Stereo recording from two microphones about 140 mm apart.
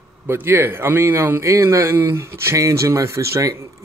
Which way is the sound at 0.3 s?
15° right (ahead or behind).